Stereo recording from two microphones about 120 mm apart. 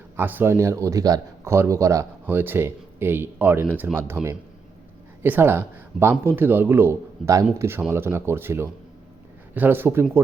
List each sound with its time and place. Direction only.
0.2 s a man's voice: 15° right (ahead or behind)